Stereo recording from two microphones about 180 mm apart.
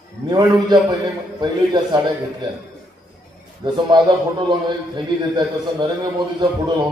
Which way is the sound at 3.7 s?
25° right (ahead or behind).